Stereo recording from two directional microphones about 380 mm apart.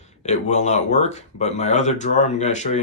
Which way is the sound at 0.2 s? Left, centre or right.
Centre.